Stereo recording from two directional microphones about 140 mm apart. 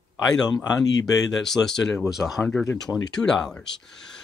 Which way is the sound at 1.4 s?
5° left (ahead or behind).